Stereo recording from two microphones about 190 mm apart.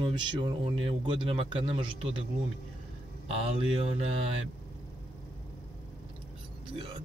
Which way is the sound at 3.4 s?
30° right (ahead or behind).